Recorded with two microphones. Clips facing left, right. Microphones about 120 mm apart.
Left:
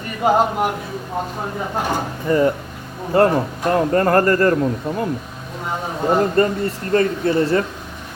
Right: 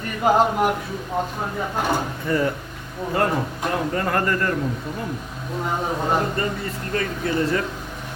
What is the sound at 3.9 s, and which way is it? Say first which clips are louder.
Speech: left 9 dB; 50° left (ahead or behind).